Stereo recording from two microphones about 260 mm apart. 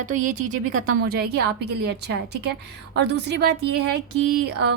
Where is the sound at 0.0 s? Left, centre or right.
Right.